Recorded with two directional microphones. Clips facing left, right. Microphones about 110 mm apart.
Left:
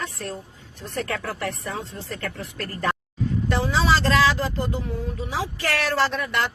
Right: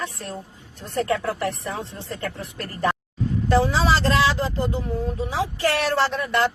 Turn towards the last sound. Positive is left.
turn(degrees=-25)  # may be behind; listen again after turning